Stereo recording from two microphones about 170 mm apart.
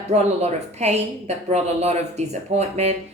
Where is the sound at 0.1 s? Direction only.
40° right (ahead or behind).